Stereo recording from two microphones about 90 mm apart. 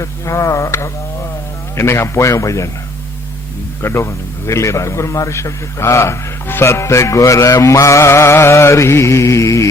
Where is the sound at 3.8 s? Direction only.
30° left (ahead or behind).